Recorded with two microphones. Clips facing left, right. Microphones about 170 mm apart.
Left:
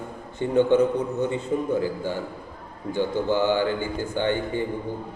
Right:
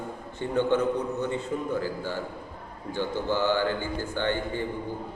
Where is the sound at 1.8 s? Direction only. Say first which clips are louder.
Left 4 dB; 15° left (ahead or behind).